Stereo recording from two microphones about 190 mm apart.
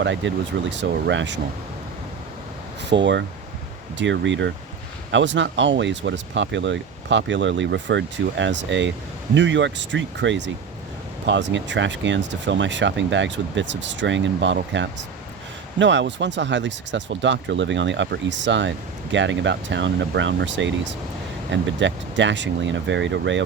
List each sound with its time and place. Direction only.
0.0 s speech: 70° right (ahead or behind)
2.9 s speech: 70° right (ahead or behind)